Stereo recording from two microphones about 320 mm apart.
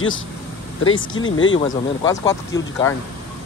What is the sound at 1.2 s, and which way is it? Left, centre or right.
Speech, left.